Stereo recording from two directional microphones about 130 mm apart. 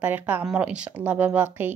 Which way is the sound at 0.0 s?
15° right (ahead or behind).